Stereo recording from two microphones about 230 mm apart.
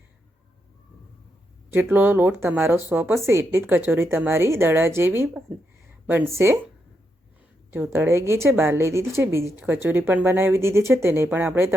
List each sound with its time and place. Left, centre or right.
1.7 s a woman's voice: centre
7.7 s a woman's voice: centre